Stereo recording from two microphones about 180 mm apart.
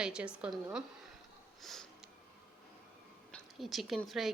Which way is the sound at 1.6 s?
Centre (ahead or behind).